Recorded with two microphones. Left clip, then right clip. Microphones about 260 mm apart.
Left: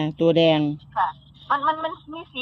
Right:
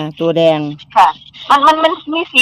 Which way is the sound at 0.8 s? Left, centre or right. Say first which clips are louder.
Right 14 dB; right.